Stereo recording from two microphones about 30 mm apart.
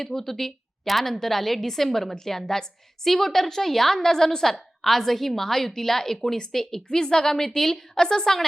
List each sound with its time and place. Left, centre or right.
0.0 s a woman's voice: centre